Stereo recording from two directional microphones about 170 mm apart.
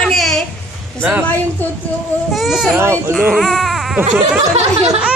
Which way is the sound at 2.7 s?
15° right (ahead or behind).